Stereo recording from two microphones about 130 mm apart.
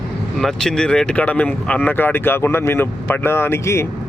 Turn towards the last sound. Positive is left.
turn(degrees=20)  # may be behind; listen again after turning